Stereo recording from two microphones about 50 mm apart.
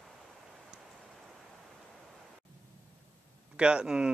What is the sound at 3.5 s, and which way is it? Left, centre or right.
Speech, centre.